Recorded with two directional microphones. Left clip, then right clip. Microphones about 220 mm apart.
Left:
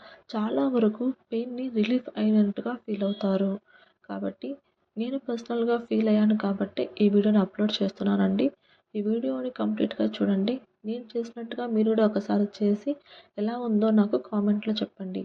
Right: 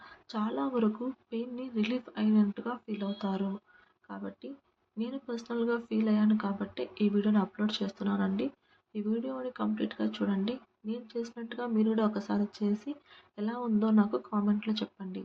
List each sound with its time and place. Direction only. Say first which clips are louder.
0.0 s speech: left 4 dB; 20° left (ahead or behind)